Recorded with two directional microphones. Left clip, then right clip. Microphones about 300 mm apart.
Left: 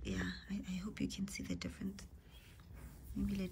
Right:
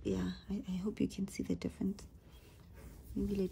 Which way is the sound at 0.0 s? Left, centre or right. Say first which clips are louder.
Right 4 dB; centre.